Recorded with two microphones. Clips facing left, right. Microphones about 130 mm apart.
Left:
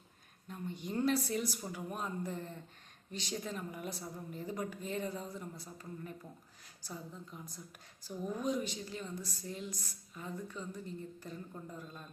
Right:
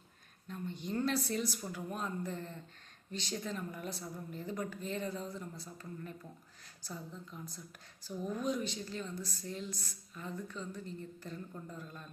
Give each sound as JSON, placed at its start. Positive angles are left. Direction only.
{"t": 0.4, "sound": "a woman's voice", "side_deg": 10}
{"t": 8.2, "sound": "a woman's voice", "side_deg": 15}